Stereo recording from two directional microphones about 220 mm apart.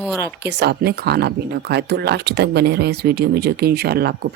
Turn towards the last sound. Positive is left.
turn(degrees=-45)  # may be behind; listen again after turning